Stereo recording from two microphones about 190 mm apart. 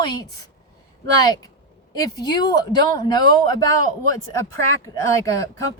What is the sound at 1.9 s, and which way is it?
Speech, 20° left (ahead or behind).